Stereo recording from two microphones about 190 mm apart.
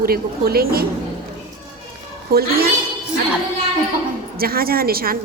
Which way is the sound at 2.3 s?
55° right (ahead or behind).